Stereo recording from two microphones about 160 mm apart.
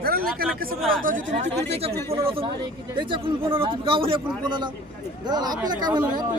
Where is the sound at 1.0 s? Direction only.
55° right (ahead or behind).